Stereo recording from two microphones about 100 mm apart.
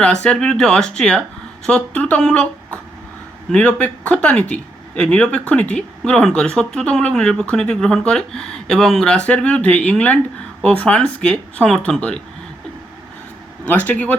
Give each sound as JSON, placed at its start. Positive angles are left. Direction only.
{"t": 0.0, "sound": "speech", "side_deg": 10}
{"t": 13.7, "sound": "speech", "side_deg": 20}